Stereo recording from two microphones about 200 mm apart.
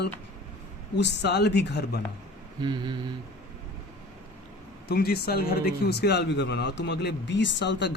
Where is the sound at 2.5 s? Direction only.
20° right (ahead or behind).